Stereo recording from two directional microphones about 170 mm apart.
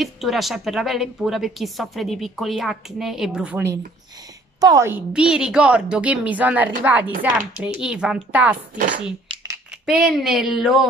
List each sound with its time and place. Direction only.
0.0 s a woman's voice: centre (ahead or behind)
9.3 s a sound: 30° right (ahead or behind)
9.8 s a woman's voice: centre (ahead or behind)